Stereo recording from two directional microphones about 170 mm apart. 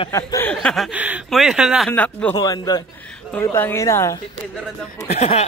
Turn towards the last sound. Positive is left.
turn(degrees=40)  # may be behind; listen again after turning